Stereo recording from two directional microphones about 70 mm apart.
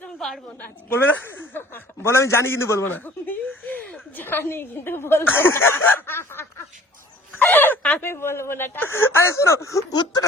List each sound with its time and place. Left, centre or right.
0.2 s a woman's voice: centre
0.9 s a woman's voice: left
2.9 s a woman's voice: left
7.5 s speech: left
9.9 s speech: left